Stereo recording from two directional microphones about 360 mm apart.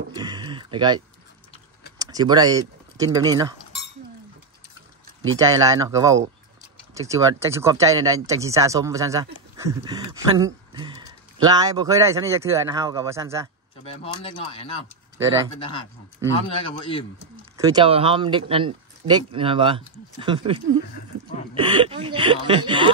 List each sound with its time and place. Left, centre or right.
0.1 s a sound: centre
2.0 s speech: centre
5.0 s a sound: right
5.8 s speech: centre
14.0 s speech: centre
16.3 s speech: centre
17.6 s speech: centre